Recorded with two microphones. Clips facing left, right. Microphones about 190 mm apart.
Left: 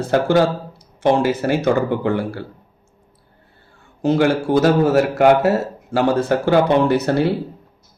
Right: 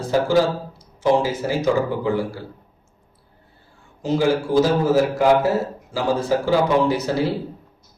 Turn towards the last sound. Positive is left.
turn(degrees=60)  # may be behind; listen again after turning